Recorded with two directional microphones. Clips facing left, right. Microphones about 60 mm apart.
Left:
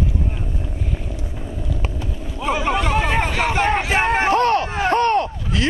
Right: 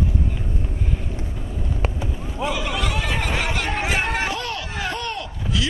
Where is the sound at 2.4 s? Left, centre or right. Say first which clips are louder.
Left 5 dB; left.